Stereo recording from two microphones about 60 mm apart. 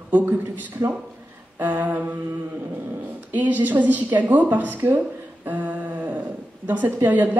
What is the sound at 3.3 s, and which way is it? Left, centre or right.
A woman's voice, right.